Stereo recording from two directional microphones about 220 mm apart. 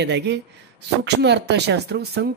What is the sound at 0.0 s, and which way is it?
Speech, 50° right (ahead or behind).